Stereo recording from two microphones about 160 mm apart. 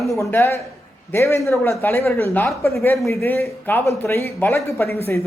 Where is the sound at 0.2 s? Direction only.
15° left (ahead or behind).